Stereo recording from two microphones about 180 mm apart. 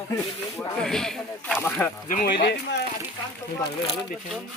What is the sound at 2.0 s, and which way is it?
Speech, 45° left (ahead or behind).